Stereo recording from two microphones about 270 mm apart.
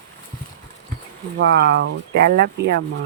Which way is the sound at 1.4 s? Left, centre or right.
Right.